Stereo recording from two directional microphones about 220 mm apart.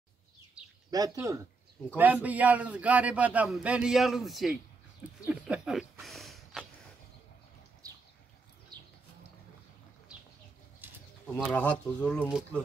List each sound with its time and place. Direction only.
0.8 s speech: 15° right (ahead or behind)
1.8 s speech: centre (ahead or behind)
5.3 s a sound: 5° right (ahead or behind)
8.7 s a sound: 20° right (ahead or behind)
10.8 s bird: 10° right (ahead or behind)
11.3 s speech: 5° left (ahead or behind)